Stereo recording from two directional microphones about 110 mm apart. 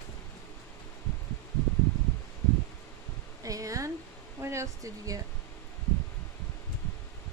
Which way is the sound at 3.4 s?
30° right (ahead or behind).